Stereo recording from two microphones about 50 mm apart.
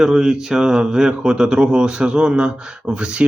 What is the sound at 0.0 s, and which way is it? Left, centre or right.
Speech, centre.